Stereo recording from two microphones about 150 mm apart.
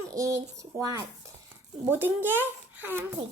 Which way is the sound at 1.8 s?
15° right (ahead or behind).